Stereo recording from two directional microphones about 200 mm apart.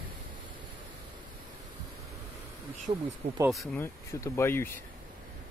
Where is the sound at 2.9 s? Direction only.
25° right (ahead or behind).